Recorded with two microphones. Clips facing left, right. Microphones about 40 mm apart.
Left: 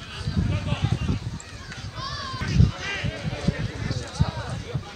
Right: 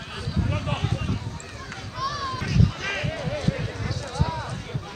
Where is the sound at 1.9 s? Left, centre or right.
Right.